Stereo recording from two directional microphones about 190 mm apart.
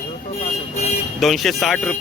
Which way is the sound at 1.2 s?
Centre (ahead or behind).